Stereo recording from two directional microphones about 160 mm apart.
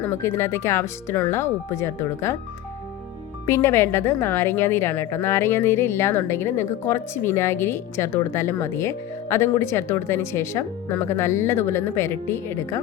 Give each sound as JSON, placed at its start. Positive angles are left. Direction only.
{"t": 0.0, "sound": "speech", "side_deg": 15}
{"t": 3.4, "sound": "speech", "side_deg": 15}